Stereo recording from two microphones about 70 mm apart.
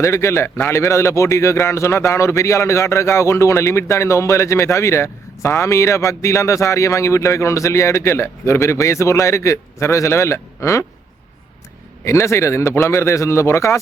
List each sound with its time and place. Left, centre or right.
0.0 s a man's voice: left
12.0 s a man's voice: left